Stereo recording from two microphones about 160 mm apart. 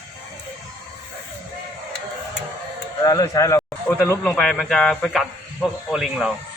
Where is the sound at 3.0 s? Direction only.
20° left (ahead or behind).